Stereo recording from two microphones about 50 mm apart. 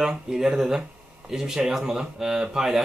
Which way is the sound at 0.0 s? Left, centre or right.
Centre.